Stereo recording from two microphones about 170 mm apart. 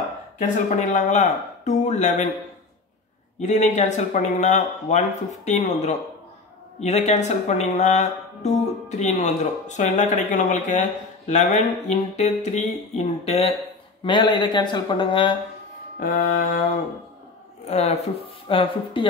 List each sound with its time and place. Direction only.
0.4 s speech: 45° left (ahead or behind)
3.3 s speech: 45° left (ahead or behind)
14.0 s speech: 25° left (ahead or behind)
16.0 s mantra: 55° left (ahead or behind)
17.6 s speech: 40° left (ahead or behind)